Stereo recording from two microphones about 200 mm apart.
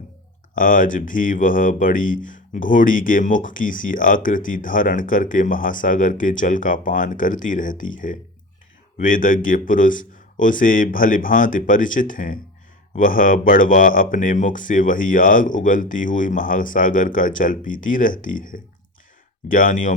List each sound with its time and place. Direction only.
0.5 s speech: 45° left (ahead or behind)